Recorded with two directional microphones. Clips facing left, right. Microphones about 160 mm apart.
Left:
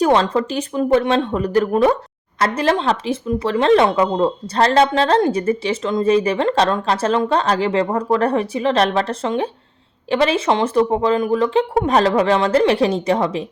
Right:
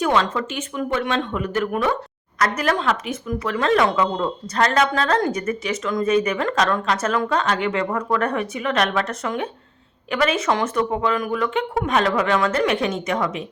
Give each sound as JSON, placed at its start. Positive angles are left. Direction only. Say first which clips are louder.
{"t": 0.0, "sound": "speech", "louder": "left 5 dB", "side_deg": 35}